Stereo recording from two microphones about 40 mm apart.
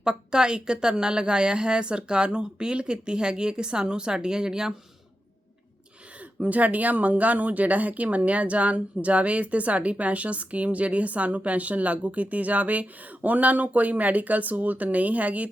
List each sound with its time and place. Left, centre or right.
0.0 s a woman's voice: centre
6.4 s speech: right